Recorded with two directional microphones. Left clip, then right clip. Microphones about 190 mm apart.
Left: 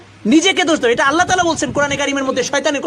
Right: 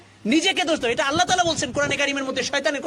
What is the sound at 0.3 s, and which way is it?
Speech, 25° right (ahead or behind).